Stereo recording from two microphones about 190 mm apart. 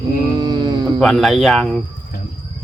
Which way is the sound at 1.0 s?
Centre (ahead or behind).